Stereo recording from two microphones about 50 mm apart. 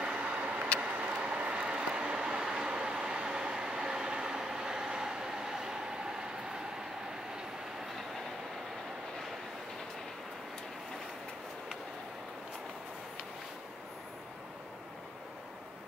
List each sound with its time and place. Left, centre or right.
0.0 s vehicle: right
0.7 s train: right